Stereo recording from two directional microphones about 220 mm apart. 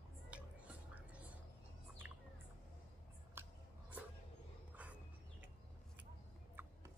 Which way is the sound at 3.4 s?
10° right (ahead or behind).